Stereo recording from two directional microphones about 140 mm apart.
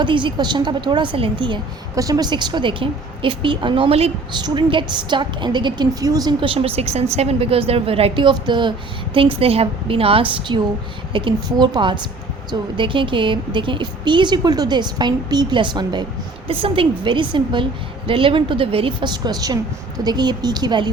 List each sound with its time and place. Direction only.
0.0 s a woman's voice: 35° right (ahead or behind)
2.0 s a woman's voice: 25° right (ahead or behind)